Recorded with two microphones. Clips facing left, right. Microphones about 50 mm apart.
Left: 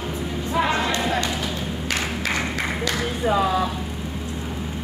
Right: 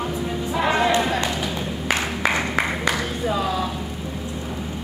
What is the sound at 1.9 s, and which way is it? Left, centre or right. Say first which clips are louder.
Music: right 4 dB; centre.